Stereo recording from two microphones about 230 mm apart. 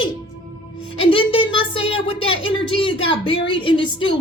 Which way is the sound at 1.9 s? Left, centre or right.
Left.